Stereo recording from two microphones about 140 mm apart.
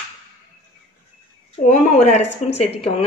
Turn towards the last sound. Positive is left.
turn(degrees=45)  # may be behind; listen again after turning